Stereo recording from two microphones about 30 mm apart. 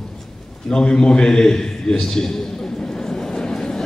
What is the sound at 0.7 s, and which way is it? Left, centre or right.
A man's voice, left.